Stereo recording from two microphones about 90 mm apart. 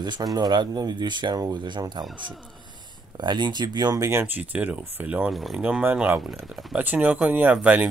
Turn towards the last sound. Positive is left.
turn(degrees=-15)  # may be behind; listen again after turning